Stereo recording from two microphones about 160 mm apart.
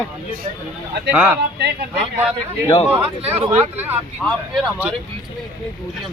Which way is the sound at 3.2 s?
40° right (ahead or behind).